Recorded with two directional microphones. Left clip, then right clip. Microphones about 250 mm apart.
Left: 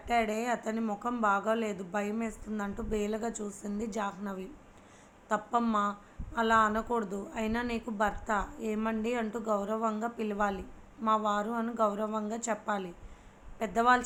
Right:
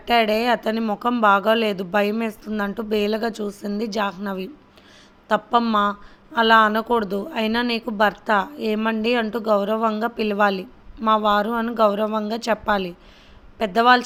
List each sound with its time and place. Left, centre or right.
0.1 s a woman's voice: right